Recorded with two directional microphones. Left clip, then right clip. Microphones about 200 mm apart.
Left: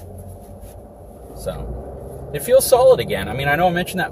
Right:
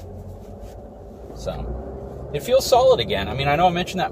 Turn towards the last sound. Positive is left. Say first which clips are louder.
# left 1 dB
turn(degrees=25)  # may be behind; listen again after turning